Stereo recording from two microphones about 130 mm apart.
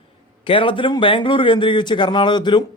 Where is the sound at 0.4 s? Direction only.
40° left (ahead or behind).